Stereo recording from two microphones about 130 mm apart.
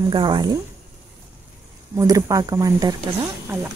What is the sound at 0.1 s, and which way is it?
Speech, 35° right (ahead or behind).